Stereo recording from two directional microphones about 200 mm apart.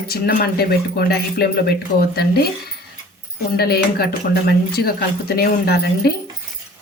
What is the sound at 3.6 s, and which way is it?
Speech, 50° left (ahead or behind).